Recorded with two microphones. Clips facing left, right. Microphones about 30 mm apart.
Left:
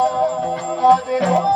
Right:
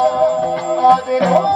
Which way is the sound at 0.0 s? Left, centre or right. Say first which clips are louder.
Right 4 dB; right.